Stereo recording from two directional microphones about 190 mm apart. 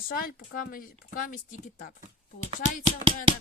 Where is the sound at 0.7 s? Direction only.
45° left (ahead or behind).